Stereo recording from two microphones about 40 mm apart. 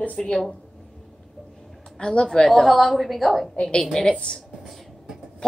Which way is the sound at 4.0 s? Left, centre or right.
Centre.